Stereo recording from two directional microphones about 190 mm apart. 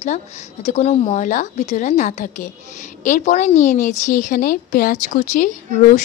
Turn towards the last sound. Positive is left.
turn(degrees=40)  # may be behind; listen again after turning